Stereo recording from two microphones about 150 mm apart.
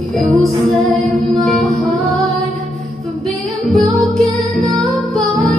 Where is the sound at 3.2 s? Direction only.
Centre (ahead or behind).